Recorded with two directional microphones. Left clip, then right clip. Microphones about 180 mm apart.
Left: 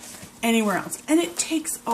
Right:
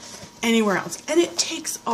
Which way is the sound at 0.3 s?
40° right (ahead or behind).